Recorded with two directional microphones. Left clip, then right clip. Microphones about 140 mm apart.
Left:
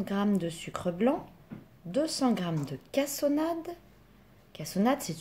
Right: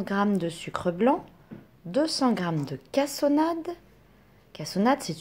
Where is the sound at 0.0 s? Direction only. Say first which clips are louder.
Right 5 dB; 25° right (ahead or behind).